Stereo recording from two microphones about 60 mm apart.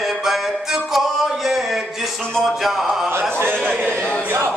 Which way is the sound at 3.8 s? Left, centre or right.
Left.